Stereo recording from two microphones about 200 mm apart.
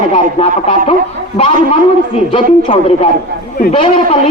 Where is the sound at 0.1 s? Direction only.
35° left (ahead or behind).